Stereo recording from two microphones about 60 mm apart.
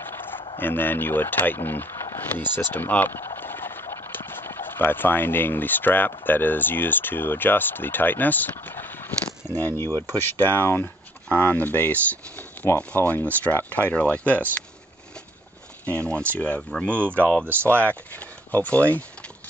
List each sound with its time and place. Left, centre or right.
0.0 s speech: left
3.3 s a sound: left
4.1 s speech: left
8.6 s a sound: left
9.8 s speech: right
10.2 s speech: left
15.8 s speech: centre